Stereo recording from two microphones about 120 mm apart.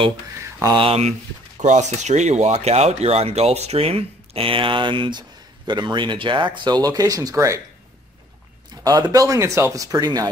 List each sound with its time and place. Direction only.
0.4 s mantra: 25° right (ahead or behind)
0.7 s speech: 55° right (ahead or behind)
1.6 s speech: 80° right; by 7.6 s 25° right (ahead or behind)
8.8 s speech: 30° right (ahead or behind)